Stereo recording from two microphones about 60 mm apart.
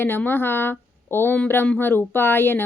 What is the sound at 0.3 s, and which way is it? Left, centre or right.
Speech, left.